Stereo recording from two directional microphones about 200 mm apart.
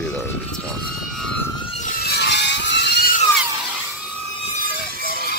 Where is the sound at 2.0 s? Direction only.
55° left (ahead or behind).